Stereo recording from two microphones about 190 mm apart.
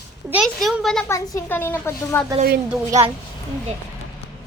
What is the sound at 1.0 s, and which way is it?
A woman's voice, 15° left (ahead or behind).